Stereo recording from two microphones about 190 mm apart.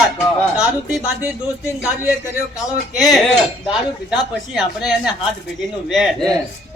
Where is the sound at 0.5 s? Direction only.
5° right (ahead or behind).